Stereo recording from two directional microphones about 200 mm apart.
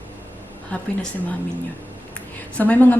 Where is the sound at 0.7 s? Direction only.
5° left (ahead or behind).